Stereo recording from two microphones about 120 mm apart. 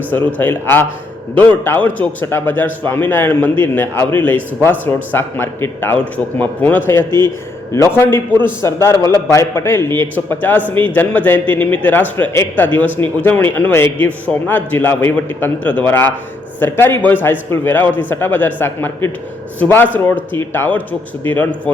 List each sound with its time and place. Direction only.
0.3 s a man's voice: 15° left (ahead or behind)